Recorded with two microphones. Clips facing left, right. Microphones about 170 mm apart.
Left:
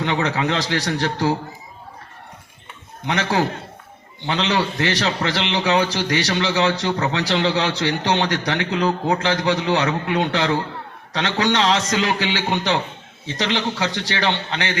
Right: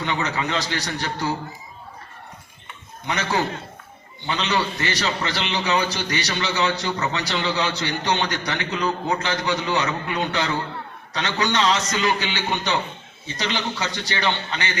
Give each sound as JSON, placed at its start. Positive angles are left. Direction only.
{"t": 0.0, "sound": "a man's voice", "side_deg": 90}
{"t": 4.3, "sound": "a man's voice", "side_deg": 90}